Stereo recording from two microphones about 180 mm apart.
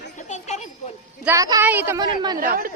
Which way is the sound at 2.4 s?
50° right (ahead or behind).